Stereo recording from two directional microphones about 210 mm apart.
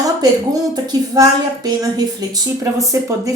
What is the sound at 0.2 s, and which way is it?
A woman's voice, 20° right (ahead or behind).